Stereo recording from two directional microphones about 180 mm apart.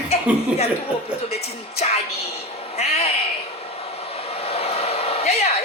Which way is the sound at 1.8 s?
40° left (ahead or behind).